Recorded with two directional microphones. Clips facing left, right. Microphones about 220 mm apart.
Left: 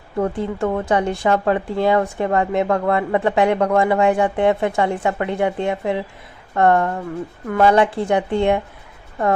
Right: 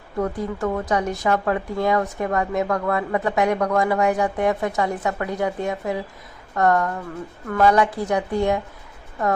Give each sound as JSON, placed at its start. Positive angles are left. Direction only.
{"t": 0.2, "sound": "speech", "side_deg": 30}